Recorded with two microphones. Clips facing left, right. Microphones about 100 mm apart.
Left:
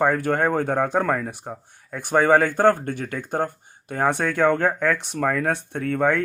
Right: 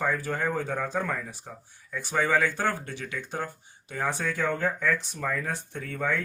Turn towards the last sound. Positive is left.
turn(degrees=60)  # may be behind; listen again after turning